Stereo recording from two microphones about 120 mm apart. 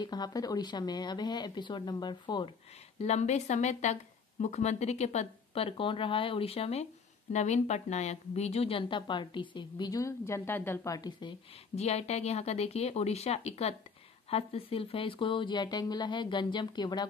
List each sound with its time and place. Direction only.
0.0 s a woman's voice: 35° left (ahead or behind)
3.0 s speech: 70° left (ahead or behind)
7.3 s a woman's voice: 70° left (ahead or behind); by 11.3 s 35° left (ahead or behind)
11.7 s a woman's voice: 65° left (ahead or behind); by 17.1 s 35° left (ahead or behind)